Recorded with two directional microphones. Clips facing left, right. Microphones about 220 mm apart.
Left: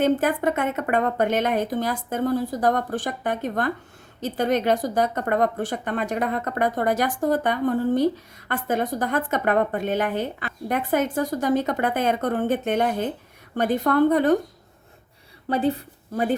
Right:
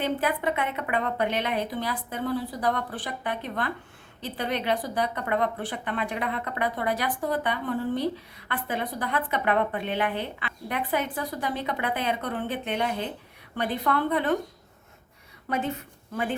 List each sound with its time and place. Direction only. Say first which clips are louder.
0.0 s speech: left 6 dB; 45° left (ahead or behind)
15.4 s a woman's voice: left 7 dB; 35° left (ahead or behind)